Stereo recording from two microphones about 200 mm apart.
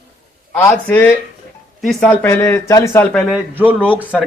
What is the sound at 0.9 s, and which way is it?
Speech, 10° left (ahead or behind).